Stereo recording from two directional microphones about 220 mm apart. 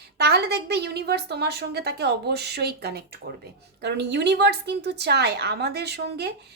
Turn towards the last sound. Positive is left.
turn(degrees=-50)  # may be behind; listen again after turning